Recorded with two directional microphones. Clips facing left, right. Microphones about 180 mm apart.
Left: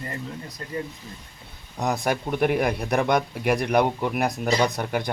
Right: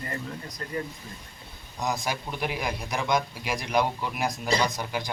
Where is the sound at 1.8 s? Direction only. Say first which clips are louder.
Left 5 dB; 60° left (ahead or behind).